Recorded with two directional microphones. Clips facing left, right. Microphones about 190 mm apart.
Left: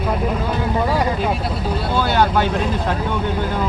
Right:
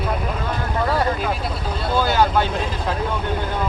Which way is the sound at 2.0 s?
Centre (ahead or behind).